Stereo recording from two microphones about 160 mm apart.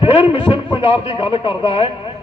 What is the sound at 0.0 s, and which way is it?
A man's voice, 35° left (ahead or behind).